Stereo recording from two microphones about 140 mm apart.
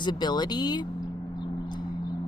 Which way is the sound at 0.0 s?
30° left (ahead or behind).